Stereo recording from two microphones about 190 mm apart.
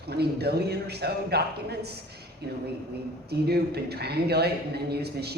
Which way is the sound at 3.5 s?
60° right (ahead or behind).